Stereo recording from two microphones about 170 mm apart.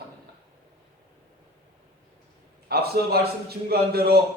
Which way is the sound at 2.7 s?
65° right (ahead or behind).